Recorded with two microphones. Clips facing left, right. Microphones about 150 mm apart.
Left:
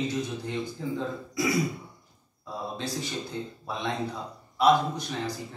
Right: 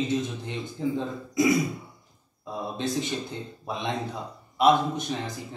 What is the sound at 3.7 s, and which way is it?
A man's voice, 20° right (ahead or behind).